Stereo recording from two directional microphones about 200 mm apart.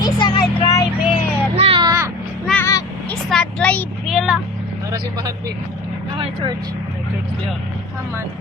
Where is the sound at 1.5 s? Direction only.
30° right (ahead or behind).